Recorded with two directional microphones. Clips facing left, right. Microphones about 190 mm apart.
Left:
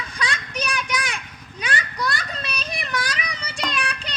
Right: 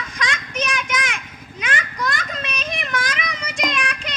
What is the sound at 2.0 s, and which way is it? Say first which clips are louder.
Child singing: right 2 dB; 35° left (ahead or behind).